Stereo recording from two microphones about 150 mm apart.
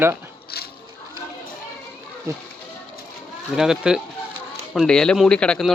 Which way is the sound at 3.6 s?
5° right (ahead or behind).